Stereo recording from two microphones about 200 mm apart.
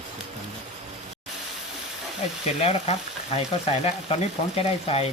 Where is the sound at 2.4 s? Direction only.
30° left (ahead or behind).